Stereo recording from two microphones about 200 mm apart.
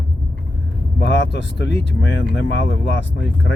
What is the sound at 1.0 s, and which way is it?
Speech, 60° left (ahead or behind).